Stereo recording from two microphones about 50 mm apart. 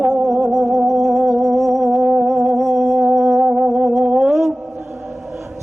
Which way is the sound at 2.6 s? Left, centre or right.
Right.